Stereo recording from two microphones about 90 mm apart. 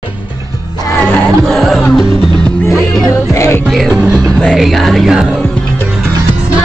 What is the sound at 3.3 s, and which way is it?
Music, 30° left (ahead or behind).